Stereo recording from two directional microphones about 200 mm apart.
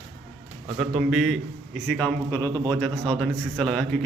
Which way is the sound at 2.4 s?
20° right (ahead or behind).